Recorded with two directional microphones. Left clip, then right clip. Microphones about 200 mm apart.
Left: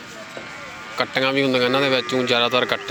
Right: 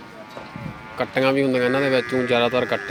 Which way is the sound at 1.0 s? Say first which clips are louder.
Even; 10° right (ahead or behind).